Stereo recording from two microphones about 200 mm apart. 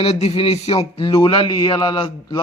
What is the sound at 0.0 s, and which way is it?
A man's voice, 30° left (ahead or behind).